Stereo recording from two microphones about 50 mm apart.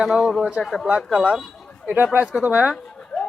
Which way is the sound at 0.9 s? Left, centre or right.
Right.